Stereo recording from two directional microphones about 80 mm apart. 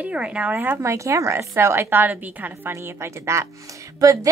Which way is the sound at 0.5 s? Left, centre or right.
Right.